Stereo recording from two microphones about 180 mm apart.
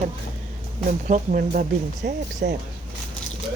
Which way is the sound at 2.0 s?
60° right (ahead or behind).